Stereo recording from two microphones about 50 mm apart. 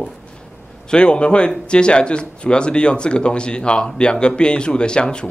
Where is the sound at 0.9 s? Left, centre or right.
Centre.